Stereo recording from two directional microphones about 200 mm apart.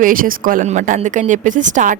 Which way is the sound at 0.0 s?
45° right (ahead or behind).